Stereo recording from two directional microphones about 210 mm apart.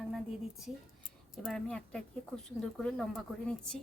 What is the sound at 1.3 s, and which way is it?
Speech, centre (ahead or behind).